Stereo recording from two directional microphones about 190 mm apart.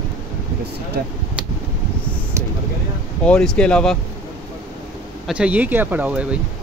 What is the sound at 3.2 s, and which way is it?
Speech, 5° left (ahead or behind).